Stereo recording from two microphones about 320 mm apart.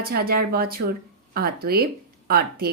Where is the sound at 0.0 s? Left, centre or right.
Right.